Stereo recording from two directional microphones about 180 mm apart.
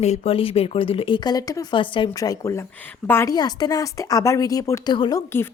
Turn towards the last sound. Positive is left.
turn(degrees=15)  # may be behind; listen again after turning